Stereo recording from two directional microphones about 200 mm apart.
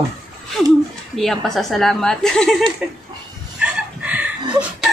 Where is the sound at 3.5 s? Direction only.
5° right (ahead or behind).